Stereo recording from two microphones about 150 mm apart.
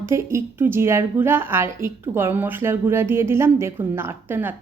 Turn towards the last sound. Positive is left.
turn(degrees=-15)  # may be behind; listen again after turning